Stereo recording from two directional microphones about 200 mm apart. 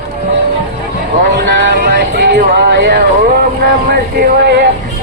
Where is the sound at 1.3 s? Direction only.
60° right (ahead or behind).